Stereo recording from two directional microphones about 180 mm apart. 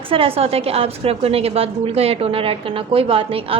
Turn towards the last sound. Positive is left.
turn(degrees=-30)  # may be behind; listen again after turning